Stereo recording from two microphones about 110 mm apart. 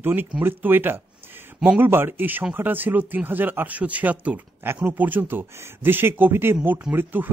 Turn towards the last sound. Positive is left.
turn(degrees=-20)  # may be behind; listen again after turning